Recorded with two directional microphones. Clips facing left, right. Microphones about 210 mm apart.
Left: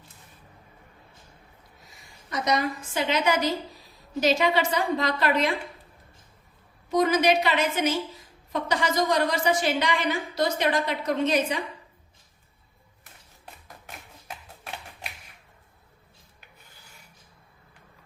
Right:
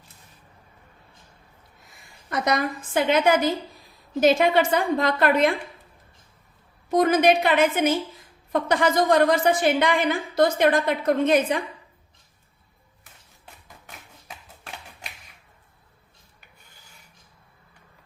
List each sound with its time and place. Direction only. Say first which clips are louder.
2.3 s a woman's voice: right 2 dB; 55° right (ahead or behind)
6.9 s a woman's voice: right 3 dB; 55° right (ahead or behind)